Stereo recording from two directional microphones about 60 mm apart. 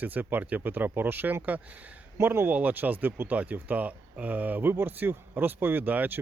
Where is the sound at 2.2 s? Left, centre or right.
Right.